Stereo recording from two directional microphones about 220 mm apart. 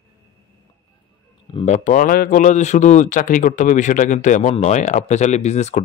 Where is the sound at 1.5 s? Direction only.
35° left (ahead or behind).